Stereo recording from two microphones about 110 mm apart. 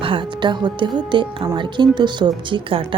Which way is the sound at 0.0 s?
50° right (ahead or behind).